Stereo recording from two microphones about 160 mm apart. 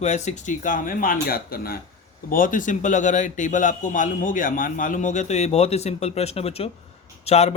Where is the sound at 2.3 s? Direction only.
55° left (ahead or behind).